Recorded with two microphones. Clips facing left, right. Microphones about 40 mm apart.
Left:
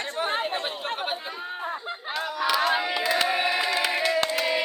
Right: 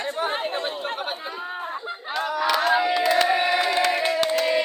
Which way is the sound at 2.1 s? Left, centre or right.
Centre.